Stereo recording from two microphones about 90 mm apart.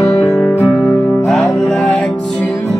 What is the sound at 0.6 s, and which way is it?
Music, 15° right (ahead or behind).